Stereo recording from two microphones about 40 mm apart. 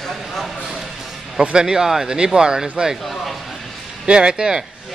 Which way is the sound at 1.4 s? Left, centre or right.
Right.